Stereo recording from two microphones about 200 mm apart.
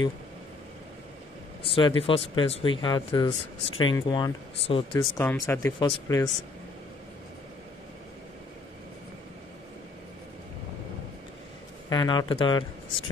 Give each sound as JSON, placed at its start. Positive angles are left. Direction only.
{"t": 1.6, "sound": "speech", "side_deg": 25}
{"t": 11.9, "sound": "speech", "side_deg": 20}